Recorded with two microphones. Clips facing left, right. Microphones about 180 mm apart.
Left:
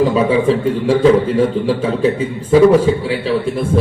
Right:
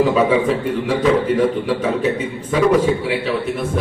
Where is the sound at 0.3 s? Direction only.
30° left (ahead or behind).